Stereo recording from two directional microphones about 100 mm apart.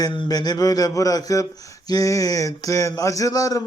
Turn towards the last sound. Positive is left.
turn(degrees=35)  # may be behind; listen again after turning